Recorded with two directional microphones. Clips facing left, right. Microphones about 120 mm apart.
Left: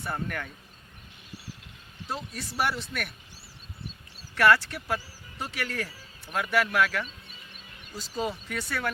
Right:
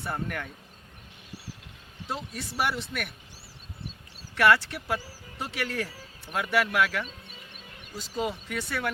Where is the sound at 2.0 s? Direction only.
20° right (ahead or behind).